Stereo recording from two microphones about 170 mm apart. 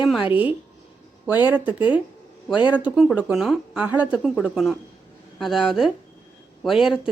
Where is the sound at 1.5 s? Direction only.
10° right (ahead or behind).